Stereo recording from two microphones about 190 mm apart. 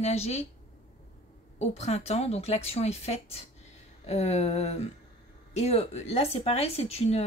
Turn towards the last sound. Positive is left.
turn(degrees=35)  # may be behind; listen again after turning